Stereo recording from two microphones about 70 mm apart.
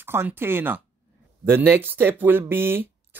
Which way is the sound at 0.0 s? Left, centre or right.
Right.